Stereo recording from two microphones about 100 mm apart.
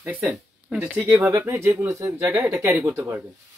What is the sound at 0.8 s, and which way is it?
Speech, 25° right (ahead or behind).